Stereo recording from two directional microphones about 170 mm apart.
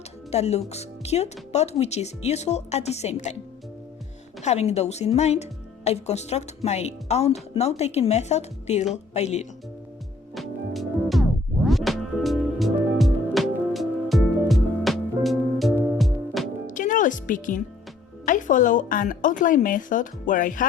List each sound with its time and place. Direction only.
0.3 s speech: 40° left (ahead or behind)
4.4 s speech: 40° left (ahead or behind)
10.3 s music: centre (ahead or behind)
16.6 s music: 50° left (ahead or behind)
18.3 s a woman's voice: 50° left (ahead or behind)